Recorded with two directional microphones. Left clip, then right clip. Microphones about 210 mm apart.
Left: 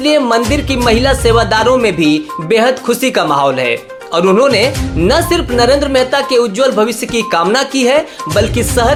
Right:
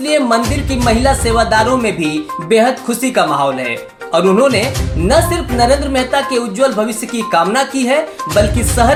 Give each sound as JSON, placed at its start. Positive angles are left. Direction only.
{"t": 0.0, "sound": "speech", "side_deg": 45}